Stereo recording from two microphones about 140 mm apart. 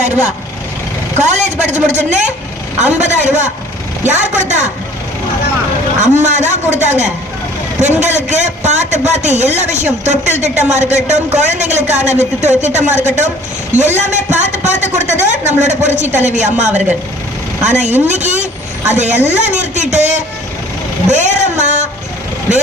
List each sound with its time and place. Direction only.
1.2 s a man's voice: 55° right (ahead or behind)
6.0 s a man's voice: 60° right (ahead or behind)
21.1 s a sound: 55° right (ahead or behind)